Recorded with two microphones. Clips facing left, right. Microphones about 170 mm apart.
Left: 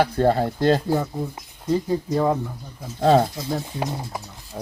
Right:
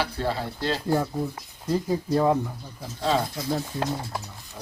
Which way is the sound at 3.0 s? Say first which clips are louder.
Left 8 dB; 50° left (ahead or behind).